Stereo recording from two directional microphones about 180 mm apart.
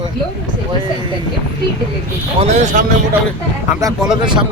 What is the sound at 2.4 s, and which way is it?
Speech, 40° right (ahead or behind).